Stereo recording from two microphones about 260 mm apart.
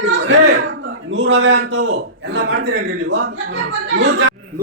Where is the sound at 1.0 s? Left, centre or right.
Right.